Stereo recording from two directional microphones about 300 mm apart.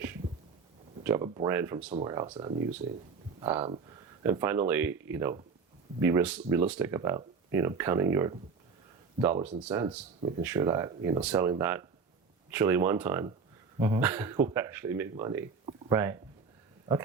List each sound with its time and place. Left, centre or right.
1.0 s speech: centre